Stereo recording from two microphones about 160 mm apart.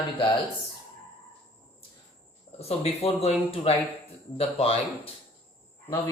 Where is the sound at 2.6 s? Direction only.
40° left (ahead or behind).